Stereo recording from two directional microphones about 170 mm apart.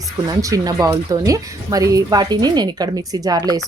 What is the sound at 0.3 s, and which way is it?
Speech, 20° right (ahead or behind).